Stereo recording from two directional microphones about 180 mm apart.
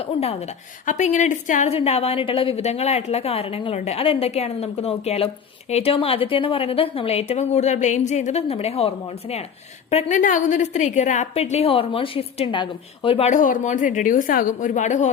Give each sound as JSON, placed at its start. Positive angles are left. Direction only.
{"t": 0.0, "sound": "a woman's voice", "side_deg": 35}